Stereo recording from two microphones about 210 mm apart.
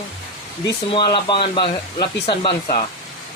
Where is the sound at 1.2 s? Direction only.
25° left (ahead or behind).